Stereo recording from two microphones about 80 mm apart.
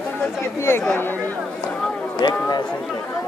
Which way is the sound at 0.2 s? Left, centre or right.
Left.